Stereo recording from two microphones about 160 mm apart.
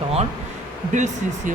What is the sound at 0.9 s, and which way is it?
Speech, 50° right (ahead or behind).